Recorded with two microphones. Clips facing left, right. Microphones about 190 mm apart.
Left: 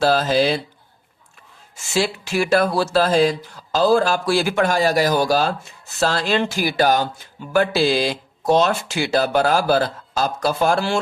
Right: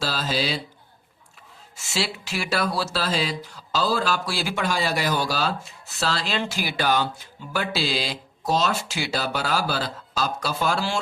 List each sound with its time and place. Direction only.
0.0 s speech: 55° left (ahead or behind)
1.7 s speech: 50° left (ahead or behind)
7.5 s speech: 55° left (ahead or behind)